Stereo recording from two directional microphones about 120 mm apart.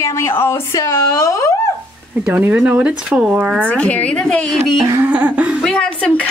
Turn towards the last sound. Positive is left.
turn(degrees=10)  # may be behind; listen again after turning